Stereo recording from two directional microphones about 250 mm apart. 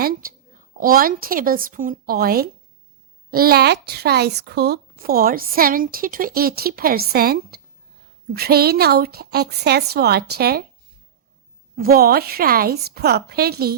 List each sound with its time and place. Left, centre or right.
0.0 s a woman's voice: right
11.8 s speech: right